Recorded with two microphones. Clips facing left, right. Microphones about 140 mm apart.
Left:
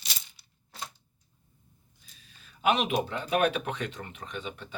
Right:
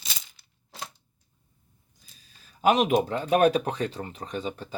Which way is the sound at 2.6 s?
40° right (ahead or behind).